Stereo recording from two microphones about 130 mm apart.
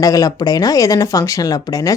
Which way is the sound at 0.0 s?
25° left (ahead or behind).